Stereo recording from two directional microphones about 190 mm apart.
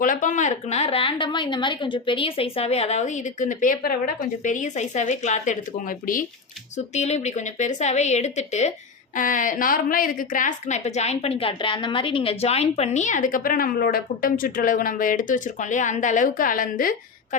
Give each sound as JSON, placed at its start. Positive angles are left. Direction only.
{"t": 0.0, "sound": "a woman's voice", "side_deg": 45}
{"t": 6.7, "sound": "a woman's voice", "side_deg": 35}